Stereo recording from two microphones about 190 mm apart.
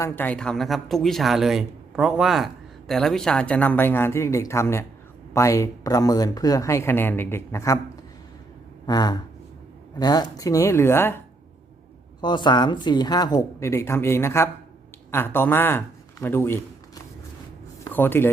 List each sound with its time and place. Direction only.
0.0 s speech: 10° left (ahead or behind)
8.9 s a woman's voice: 20° left (ahead or behind)
12.2 s a woman's voice: 25° left (ahead or behind)